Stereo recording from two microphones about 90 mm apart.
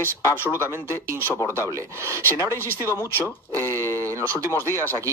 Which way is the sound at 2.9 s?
30° left (ahead or behind).